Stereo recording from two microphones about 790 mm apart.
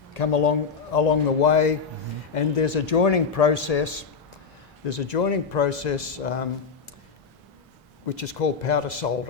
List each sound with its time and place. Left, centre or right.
0.1 s a man's voice: left
8.1 s a man's voice: left